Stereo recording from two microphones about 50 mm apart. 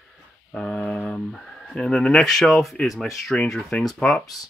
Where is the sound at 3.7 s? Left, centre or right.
Left.